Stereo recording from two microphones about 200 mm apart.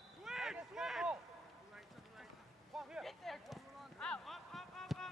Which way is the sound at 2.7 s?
Centre (ahead or behind).